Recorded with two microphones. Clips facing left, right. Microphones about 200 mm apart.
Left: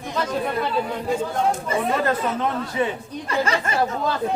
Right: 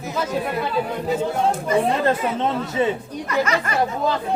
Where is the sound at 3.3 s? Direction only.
30° left (ahead or behind).